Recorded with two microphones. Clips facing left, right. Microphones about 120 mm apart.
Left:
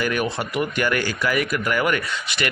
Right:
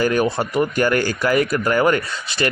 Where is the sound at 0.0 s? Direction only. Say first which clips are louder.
Right 5 dB; 35° right (ahead or behind).